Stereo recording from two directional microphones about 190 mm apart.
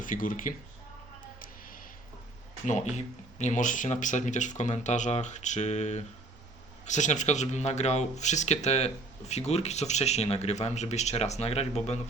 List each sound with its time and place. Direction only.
0.0 s speech: 45° left (ahead or behind)
2.6 s speech: 40° left (ahead or behind)